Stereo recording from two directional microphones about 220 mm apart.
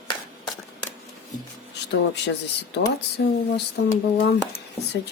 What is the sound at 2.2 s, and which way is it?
Speech, 50° left (ahead or behind).